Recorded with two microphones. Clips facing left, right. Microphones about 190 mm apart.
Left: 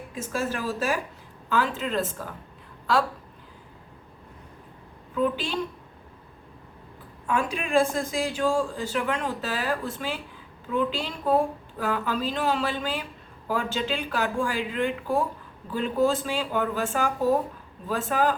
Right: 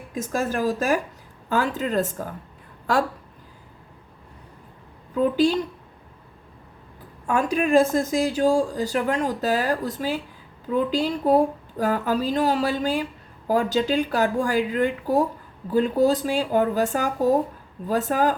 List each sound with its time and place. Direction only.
0.1 s speech: 45° right (ahead or behind)
5.1 s speech: 40° right (ahead or behind)
7.3 s speech: 45° right (ahead or behind)